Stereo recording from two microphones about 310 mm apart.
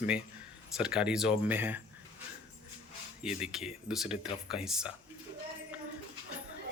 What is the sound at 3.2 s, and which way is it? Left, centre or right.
Speech, centre.